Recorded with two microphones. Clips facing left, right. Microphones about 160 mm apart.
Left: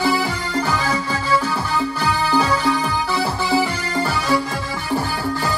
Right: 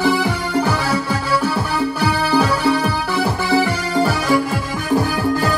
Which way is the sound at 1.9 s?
15° right (ahead or behind).